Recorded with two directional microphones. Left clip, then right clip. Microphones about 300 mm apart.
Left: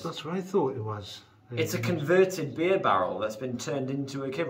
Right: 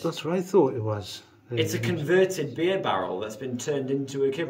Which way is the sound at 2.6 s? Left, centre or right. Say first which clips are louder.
Left 2 dB; left.